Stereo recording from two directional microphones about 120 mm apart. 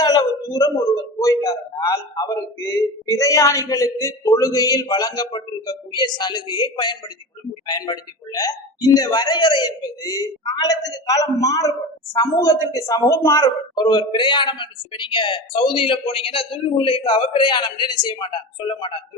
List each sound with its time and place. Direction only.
0.0 s a man's voice: 35° left (ahead or behind)